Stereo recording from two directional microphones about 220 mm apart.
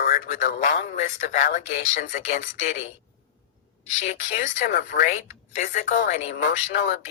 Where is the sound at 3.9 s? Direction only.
30° left (ahead or behind).